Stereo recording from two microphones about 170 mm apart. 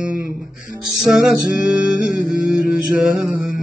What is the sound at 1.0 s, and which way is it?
Mantra, centre (ahead or behind).